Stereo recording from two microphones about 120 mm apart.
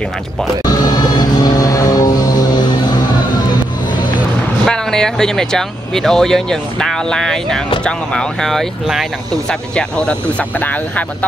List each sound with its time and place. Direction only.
0.7 s vehicle: 35° left (ahead or behind)
4.6 s speech: 5° left (ahead or behind)